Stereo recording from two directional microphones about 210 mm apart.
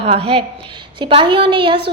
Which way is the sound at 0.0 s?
25° right (ahead or behind).